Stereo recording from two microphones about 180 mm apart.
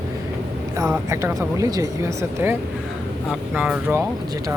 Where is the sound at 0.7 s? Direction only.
15° right (ahead or behind).